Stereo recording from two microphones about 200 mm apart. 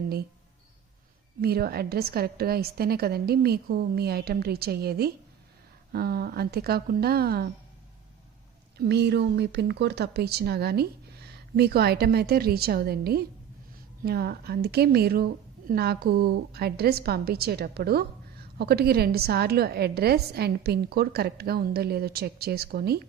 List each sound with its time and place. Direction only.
1.4 s a woman's voice: 50° right (ahead or behind)
8.8 s a woman's voice: 55° right (ahead or behind)